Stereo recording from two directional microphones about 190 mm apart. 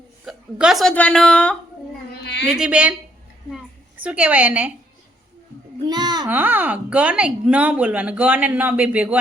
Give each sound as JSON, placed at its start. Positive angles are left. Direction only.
{"t": 0.3, "sound": "speech", "side_deg": 0}
{"t": 2.6, "sound": "a woman's voice", "side_deg": -5}
{"t": 5.8, "sound": "a child's voice", "side_deg": -20}
{"t": 6.2, "sound": "speech", "side_deg": -10}